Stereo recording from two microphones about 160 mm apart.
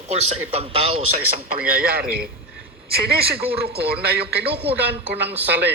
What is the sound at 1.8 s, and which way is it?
Speech, 70° right (ahead or behind).